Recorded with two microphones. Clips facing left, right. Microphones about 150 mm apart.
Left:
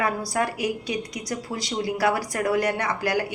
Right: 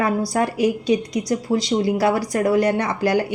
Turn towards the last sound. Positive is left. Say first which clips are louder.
# right 5 dB
turn(degrees=-25)  # may be behind; listen again after turning